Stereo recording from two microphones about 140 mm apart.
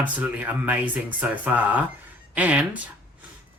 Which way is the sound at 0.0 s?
10° right (ahead or behind).